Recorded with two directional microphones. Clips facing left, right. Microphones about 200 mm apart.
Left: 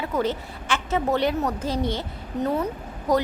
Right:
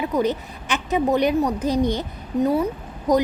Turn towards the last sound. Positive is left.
turn(degrees=-15)  # may be behind; listen again after turning